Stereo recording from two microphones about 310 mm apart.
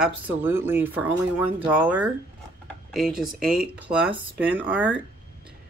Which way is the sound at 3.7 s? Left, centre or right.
Centre.